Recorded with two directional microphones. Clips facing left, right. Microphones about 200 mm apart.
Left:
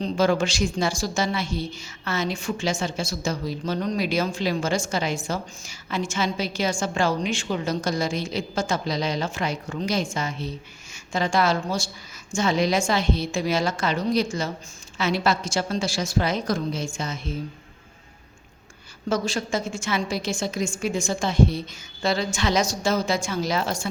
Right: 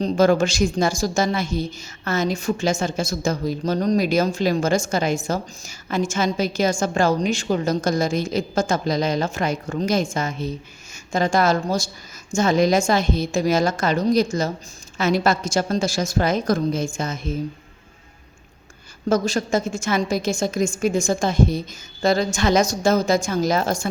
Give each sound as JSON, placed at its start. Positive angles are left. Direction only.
{"t": 0.0, "sound": "a woman's voice", "side_deg": -40}
{"t": 19.0, "sound": "a woman's voice", "side_deg": -45}